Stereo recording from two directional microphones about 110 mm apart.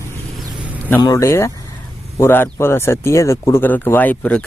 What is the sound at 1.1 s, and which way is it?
Speech, 25° left (ahead or behind).